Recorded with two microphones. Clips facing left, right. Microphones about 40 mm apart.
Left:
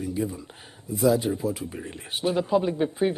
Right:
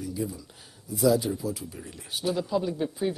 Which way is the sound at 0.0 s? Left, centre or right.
Left.